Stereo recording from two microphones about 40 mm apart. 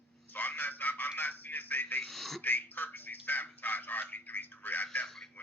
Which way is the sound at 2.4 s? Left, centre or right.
Left.